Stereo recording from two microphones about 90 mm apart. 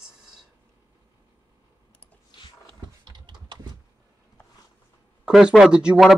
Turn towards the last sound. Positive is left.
turn(degrees=-10)  # may be behind; listen again after turning